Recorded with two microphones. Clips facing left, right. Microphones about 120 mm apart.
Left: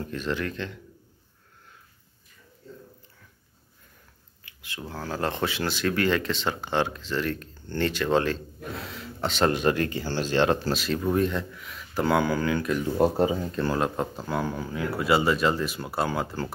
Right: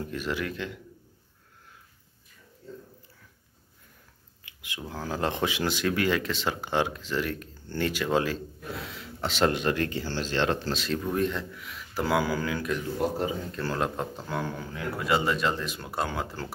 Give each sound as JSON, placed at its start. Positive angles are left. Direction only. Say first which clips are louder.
{"t": 0.0, "sound": "speech", "louder": "left 2 dB", "side_deg": -10}
{"t": 4.5, "sound": "speech", "louder": "left 1 dB", "side_deg": -15}
{"t": 9.7, "sound": "speech", "louder": "left 3 dB", "side_deg": 10}
{"t": 12.9, "sound": "speech", "louder": "left 8 dB", "side_deg": 30}
{"t": 13.7, "sound": "speech", "louder": "left 3 dB", "side_deg": 0}